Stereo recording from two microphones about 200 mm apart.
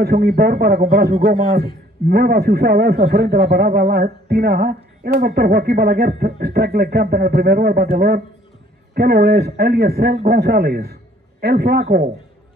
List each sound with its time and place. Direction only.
0.0 s a man's voice: 50° right (ahead or behind)